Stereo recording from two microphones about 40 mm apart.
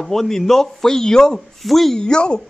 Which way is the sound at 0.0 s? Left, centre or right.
Centre.